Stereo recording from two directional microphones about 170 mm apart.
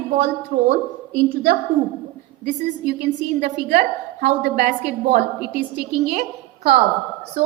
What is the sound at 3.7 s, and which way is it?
A woman's voice, 50° right (ahead or behind).